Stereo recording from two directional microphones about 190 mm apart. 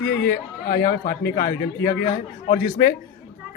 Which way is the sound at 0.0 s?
60° left (ahead or behind).